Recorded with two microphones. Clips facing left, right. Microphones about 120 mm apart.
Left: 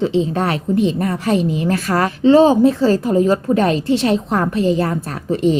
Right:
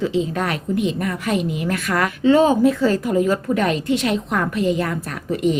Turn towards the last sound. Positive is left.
turn(degrees=30)  # may be behind; listen again after turning